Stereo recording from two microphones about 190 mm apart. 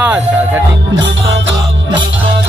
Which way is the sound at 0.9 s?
90° right.